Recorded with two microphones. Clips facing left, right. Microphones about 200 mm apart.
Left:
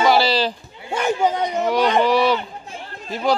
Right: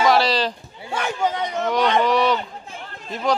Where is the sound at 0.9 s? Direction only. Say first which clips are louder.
Left 4 dB; 15° left (ahead or behind).